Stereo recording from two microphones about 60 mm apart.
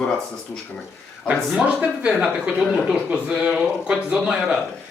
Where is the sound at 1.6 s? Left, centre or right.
Right.